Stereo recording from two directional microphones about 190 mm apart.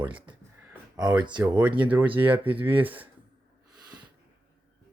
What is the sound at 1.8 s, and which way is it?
Speech, 10° right (ahead or behind).